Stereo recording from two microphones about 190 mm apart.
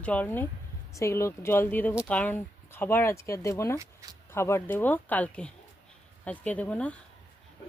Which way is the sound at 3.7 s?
20° right (ahead or behind).